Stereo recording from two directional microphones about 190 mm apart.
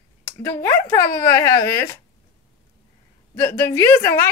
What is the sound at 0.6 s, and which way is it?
A woman's voice, 10° left (ahead or behind).